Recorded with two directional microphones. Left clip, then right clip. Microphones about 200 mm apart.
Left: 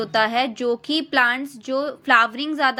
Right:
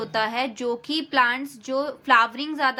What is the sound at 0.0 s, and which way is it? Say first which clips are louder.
A woman's voice: left 5 dB; 20° left (ahead or behind).